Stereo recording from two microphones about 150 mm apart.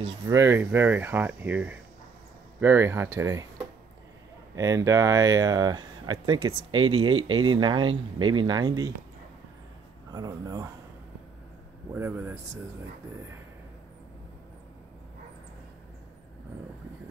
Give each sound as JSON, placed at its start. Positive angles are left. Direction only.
{"t": 0.3, "sound": "speech", "side_deg": -20}
{"t": 4.6, "sound": "speech", "side_deg": -25}
{"t": 10.1, "sound": "speech", "side_deg": -25}
{"t": 11.9, "sound": "speech", "side_deg": -10}